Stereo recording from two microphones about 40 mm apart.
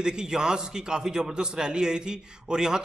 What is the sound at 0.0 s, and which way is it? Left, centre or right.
A man's voice, centre.